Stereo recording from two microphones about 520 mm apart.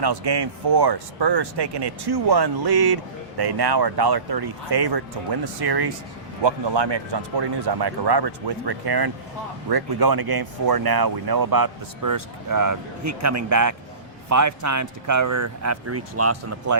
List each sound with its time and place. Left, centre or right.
0.0 s speech: right